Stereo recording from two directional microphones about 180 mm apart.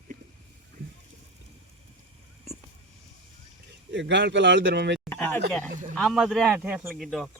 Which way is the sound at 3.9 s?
80° right.